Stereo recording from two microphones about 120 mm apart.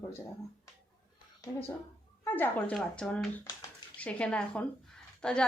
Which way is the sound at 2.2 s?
15° left (ahead or behind).